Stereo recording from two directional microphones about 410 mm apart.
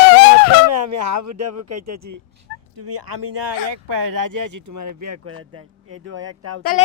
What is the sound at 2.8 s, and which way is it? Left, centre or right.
Speech, right.